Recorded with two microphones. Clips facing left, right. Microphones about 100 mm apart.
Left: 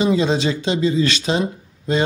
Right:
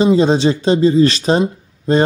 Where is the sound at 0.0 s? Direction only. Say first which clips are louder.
Right 6 dB; 35° right (ahead or behind).